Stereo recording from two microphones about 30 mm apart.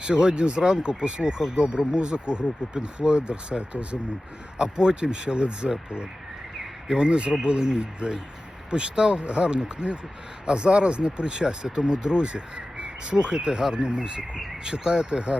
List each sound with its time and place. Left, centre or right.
0.0 s speech: right
2.0 s speech: right
4.5 s speech: right
6.8 s speech: right